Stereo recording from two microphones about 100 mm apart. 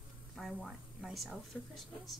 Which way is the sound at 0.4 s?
Centre (ahead or behind).